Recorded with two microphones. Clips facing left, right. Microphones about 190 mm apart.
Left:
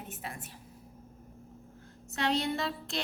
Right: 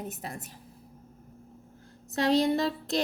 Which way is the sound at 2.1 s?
35° right (ahead or behind).